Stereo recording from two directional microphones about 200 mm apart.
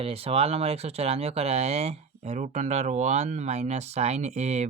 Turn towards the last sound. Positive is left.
turn(degrees=-35)  # may be behind; listen again after turning